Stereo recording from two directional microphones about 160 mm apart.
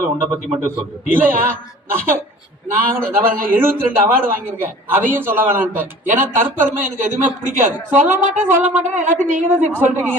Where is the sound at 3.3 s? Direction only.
65° right (ahead or behind).